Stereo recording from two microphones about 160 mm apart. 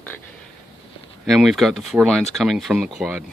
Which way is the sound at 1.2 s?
Centre (ahead or behind).